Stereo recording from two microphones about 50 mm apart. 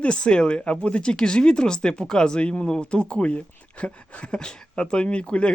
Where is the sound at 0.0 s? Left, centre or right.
Centre.